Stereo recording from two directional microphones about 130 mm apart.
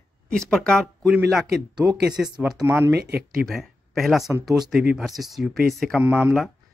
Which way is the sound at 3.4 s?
Centre (ahead or behind).